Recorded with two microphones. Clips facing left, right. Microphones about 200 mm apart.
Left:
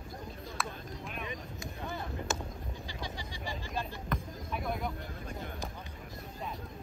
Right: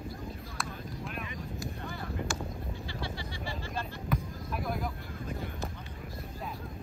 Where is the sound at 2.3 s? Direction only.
20° left (ahead or behind).